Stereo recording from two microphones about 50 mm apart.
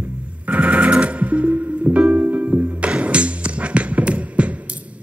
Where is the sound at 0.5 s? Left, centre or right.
Right.